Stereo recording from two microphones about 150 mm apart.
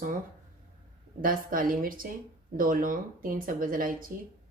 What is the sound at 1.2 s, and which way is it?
A woman's voice, 70° right (ahead or behind).